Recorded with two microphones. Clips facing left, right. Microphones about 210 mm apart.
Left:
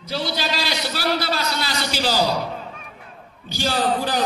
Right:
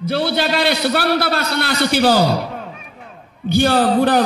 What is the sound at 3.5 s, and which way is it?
Speech, 55° right (ahead or behind).